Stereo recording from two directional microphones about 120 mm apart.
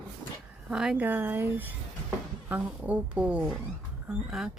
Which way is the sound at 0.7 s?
5° right (ahead or behind).